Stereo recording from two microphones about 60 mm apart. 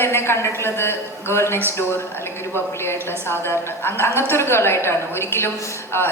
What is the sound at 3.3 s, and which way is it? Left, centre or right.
A woman's voice, left.